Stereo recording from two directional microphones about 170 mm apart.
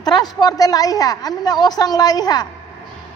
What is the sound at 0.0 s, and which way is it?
A woman's voice, 25° left (ahead or behind).